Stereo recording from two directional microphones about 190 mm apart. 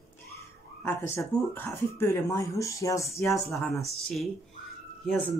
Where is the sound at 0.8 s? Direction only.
10° left (ahead or behind).